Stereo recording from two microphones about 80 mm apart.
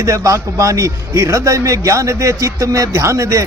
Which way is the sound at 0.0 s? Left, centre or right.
Right.